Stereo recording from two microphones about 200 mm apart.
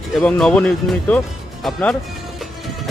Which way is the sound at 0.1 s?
5° left (ahead or behind).